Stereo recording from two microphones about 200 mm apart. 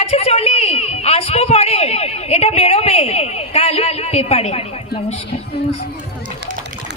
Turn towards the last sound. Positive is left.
turn(degrees=30)  # may be behind; listen again after turning